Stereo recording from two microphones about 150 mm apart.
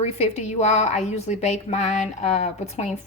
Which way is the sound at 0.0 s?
45° left (ahead or behind).